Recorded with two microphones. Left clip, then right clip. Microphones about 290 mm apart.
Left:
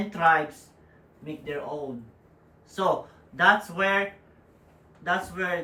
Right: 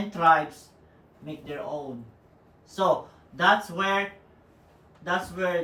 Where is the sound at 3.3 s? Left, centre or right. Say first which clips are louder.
Left 1 dB; centre.